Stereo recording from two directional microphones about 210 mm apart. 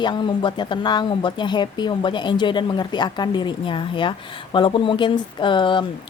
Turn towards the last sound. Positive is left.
turn(degrees=25)  # may be behind; listen again after turning